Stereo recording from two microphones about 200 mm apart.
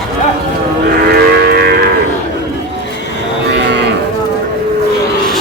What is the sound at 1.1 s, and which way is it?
Livestock, 50° right (ahead or behind).